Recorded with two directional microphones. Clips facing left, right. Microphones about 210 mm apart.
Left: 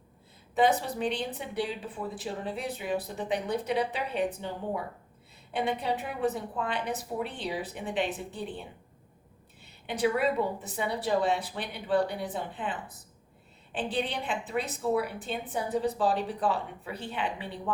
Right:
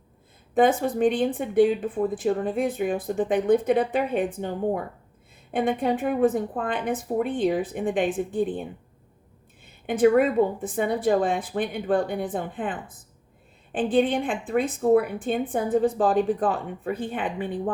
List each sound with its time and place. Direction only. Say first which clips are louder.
0.5 s speech: right 5 dB; 50° right (ahead or behind)
9.6 s speech: right 9 dB; 50° right (ahead or behind)
13.7 s speech: right 10 dB; 50° right (ahead or behind)